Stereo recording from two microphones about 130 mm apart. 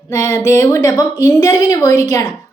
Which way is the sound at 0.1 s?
20° left (ahead or behind).